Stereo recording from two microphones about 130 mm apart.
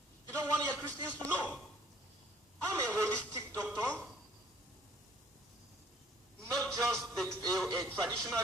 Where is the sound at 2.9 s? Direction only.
10° left (ahead or behind).